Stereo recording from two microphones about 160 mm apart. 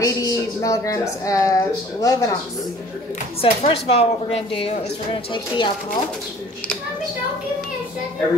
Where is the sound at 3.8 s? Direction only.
40° left (ahead or behind).